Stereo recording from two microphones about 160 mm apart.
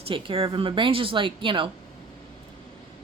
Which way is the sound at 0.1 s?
35° right (ahead or behind).